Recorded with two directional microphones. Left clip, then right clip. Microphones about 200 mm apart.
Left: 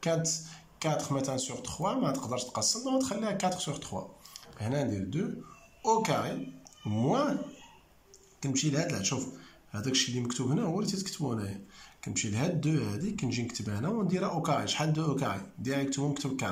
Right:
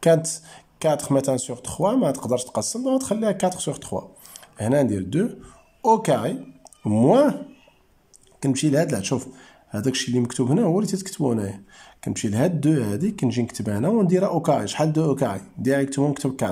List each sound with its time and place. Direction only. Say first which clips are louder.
0.0 s speech: right 12 dB; 40° right (ahead or behind)
8.4 s speech: right 11 dB; 35° right (ahead or behind)